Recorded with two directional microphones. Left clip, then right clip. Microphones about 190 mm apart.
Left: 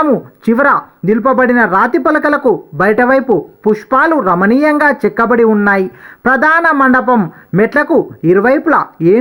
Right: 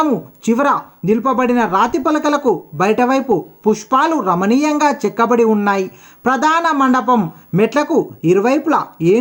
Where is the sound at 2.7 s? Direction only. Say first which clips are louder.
Left 5 dB; 10° left (ahead or behind).